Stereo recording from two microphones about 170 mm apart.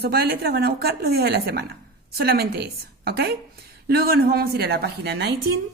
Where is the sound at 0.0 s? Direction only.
65° right (ahead or behind).